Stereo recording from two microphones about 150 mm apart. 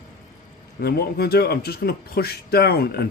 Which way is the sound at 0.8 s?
90° left.